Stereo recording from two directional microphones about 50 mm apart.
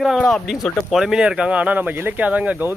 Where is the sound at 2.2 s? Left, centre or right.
Right.